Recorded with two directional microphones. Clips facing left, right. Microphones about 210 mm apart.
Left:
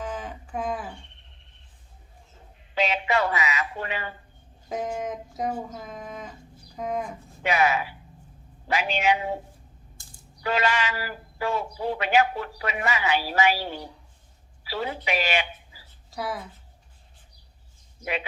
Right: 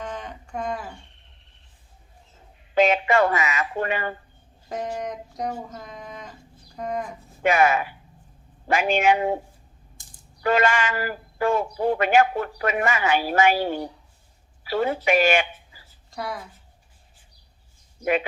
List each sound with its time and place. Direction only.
0.0 s a sound: 5° left (ahead or behind)
2.7 s speech: 50° right (ahead or behind)
4.7 s speech: centre (ahead or behind)
7.4 s speech: 50° right (ahead or behind)
10.4 s speech: 50° right (ahead or behind)
14.6 s a sound: 50° right (ahead or behind)
15.0 s speech: 50° right (ahead or behind)
16.0 s speech: 5° left (ahead or behind)
18.0 s speech: 50° right (ahead or behind)